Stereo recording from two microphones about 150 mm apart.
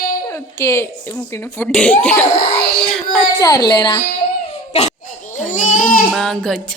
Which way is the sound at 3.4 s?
25° left (ahead or behind).